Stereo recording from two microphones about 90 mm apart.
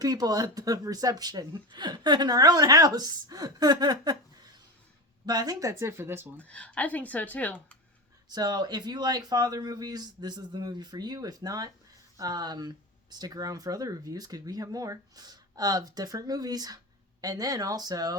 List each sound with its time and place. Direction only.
0.0 s speech: 45° right (ahead or behind)
5.2 s speech: 45° right (ahead or behind)
6.0 s speech: 25° right (ahead or behind)
6.4 s a woman's voice: 15° left (ahead or behind)
8.3 s speech: 50° right (ahead or behind)